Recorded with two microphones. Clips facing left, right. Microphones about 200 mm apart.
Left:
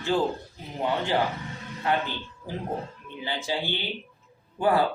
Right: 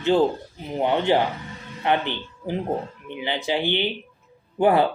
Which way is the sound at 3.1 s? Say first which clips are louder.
Right 5 dB; 20° right (ahead or behind).